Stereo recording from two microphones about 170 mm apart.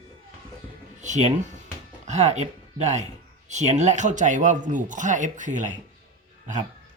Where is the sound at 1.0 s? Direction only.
45° right (ahead or behind).